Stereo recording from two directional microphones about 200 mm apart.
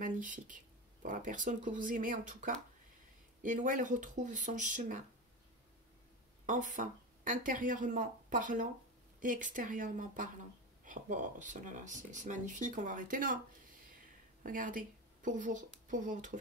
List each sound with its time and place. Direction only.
0.0 s speech: 40° right (ahead or behind)
6.4 s speech: 40° right (ahead or behind)
14.4 s a woman's voice: 40° right (ahead or behind)